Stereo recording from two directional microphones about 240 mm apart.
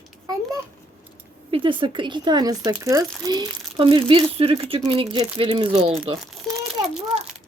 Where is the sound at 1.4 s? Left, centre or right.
Right.